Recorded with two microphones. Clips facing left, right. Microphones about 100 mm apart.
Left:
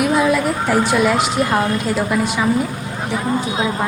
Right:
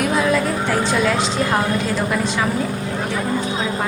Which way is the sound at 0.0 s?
15° left (ahead or behind).